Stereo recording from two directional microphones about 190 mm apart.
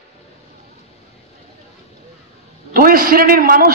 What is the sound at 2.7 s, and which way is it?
A man's voice, 50° right (ahead or behind).